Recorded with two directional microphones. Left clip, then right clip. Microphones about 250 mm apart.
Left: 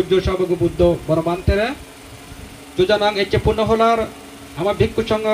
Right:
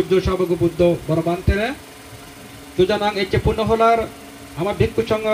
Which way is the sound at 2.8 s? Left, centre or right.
Left.